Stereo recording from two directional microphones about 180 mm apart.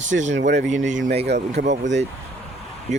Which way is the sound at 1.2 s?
70° right (ahead or behind).